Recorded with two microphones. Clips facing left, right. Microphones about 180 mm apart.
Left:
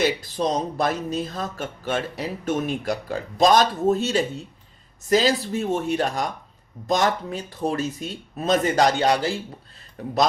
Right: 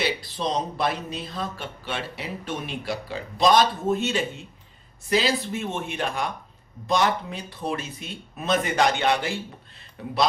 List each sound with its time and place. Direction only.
0.0 s speech: 45° left (ahead or behind)